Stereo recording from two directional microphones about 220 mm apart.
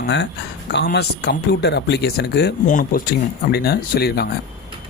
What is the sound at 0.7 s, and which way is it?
Speech, 50° left (ahead or behind).